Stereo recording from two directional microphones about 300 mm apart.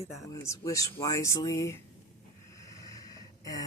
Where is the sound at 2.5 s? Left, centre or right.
Centre.